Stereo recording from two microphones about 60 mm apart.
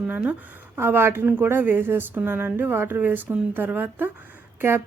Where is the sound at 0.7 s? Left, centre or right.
Right.